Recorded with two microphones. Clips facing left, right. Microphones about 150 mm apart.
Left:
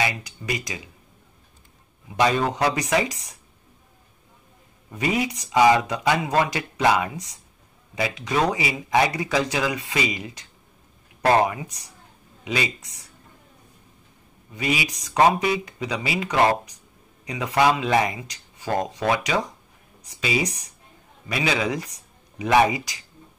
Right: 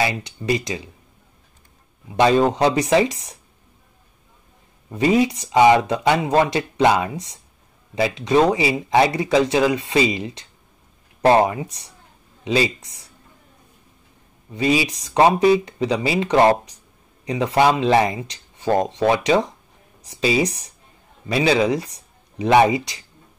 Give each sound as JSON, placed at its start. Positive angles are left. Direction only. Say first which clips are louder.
{"t": 0.0, "sound": "speech", "louder": "right 4 dB", "side_deg": -30}
{"t": 2.1, "sound": "speech", "louder": "right 5 dB", "side_deg": -30}
{"t": 4.9, "sound": "speech", "louder": "right 7 dB", "side_deg": -30}
{"t": 14.5, "sound": "speech", "louder": "right 7 dB", "side_deg": -30}